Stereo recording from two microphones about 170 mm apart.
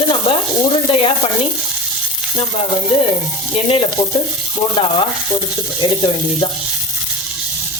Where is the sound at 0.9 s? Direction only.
30° left (ahead or behind).